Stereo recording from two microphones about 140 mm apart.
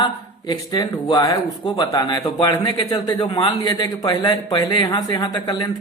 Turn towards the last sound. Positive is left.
turn(degrees=30)  # may be behind; listen again after turning